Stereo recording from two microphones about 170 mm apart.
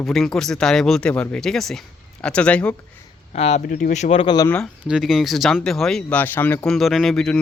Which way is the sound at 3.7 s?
50° left (ahead or behind).